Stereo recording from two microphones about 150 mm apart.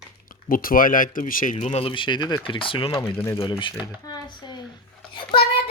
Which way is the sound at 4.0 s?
30° left (ahead or behind).